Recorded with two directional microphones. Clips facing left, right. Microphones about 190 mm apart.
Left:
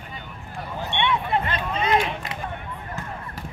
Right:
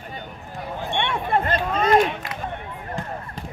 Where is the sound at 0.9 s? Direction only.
50° right (ahead or behind).